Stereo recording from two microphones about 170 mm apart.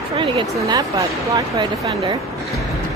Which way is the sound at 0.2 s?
30° right (ahead or behind).